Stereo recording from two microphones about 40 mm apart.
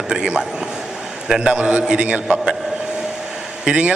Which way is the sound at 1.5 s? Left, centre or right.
Right.